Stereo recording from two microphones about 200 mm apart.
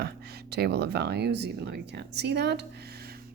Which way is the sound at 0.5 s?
55° right (ahead or behind).